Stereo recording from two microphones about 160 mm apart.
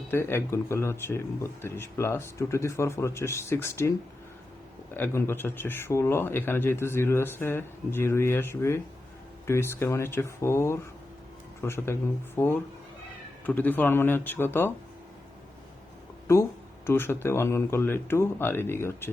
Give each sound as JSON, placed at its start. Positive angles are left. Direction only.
{"t": 0.1, "sound": "speech", "side_deg": 15}
{"t": 4.9, "sound": "speech", "side_deg": 15}
{"t": 16.2, "sound": "speech", "side_deg": 15}